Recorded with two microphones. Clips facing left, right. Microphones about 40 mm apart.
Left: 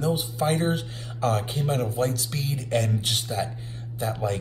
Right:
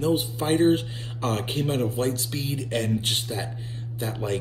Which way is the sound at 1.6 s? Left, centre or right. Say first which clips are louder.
Right 1 dB; right.